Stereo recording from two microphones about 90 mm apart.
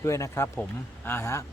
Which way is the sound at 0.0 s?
35° left (ahead or behind).